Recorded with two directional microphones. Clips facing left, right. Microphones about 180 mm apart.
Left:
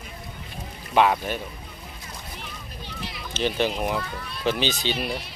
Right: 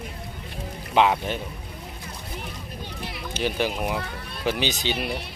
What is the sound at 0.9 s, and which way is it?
Speech, 15° right (ahead or behind).